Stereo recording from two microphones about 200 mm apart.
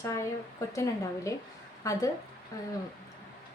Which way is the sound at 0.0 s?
15° left (ahead or behind).